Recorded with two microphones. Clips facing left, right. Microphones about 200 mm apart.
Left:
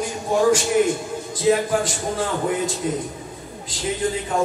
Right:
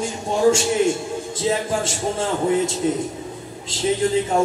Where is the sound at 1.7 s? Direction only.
25° right (ahead or behind).